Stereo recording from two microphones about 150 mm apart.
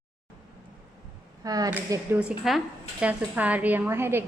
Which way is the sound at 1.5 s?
25° right (ahead or behind).